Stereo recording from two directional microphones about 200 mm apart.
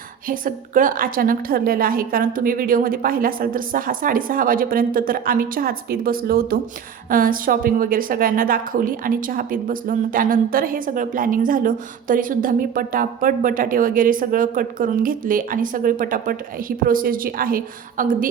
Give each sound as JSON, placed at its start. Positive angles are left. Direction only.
{"t": 0.3, "sound": "a woman's voice", "side_deg": -45}